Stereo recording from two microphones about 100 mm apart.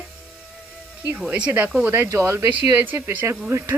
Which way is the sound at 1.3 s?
15° right (ahead or behind).